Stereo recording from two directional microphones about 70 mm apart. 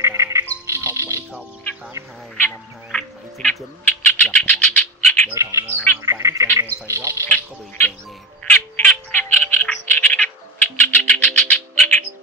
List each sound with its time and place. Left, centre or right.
0.0 s frog: right
0.7 s music: right
2.9 s music: centre
4.1 s bird: left
5.3 s speech: right
7.2 s speech: left
8.5 s frog: left
10.8 s music: left